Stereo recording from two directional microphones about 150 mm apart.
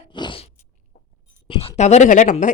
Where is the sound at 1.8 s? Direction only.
50° left (ahead or behind).